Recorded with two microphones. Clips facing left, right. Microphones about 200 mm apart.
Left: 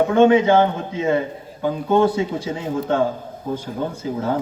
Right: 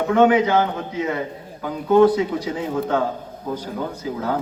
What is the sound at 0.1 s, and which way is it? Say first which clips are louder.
A man's voice: right 1 dB; 25° left (ahead or behind).